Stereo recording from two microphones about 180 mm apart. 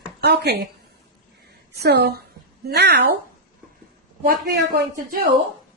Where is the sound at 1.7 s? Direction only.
65° right (ahead or behind).